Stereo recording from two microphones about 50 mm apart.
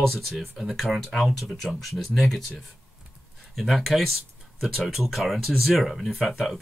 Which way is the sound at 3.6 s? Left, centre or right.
Centre.